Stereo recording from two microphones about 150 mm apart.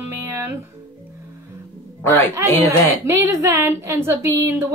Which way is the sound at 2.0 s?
15° left (ahead or behind).